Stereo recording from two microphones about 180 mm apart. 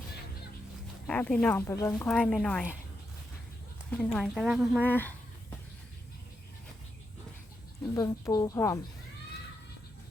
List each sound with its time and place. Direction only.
1.0 s speech: 5° left (ahead or behind)
2.0 s speech: 5° left (ahead or behind)
3.9 s speech: centre (ahead or behind)
4.8 s speech: 10° left (ahead or behind)
7.9 s speech: 20° left (ahead or behind)